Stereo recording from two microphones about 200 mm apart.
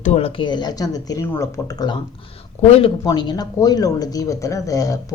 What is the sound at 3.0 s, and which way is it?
Speech, 20° left (ahead or behind).